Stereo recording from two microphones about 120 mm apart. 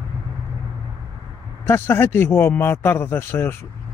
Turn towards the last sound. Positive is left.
turn(degrees=20)  # may be behind; listen again after turning